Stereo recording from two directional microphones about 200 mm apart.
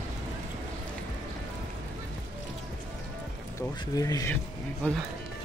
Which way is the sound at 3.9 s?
20° left (ahead or behind).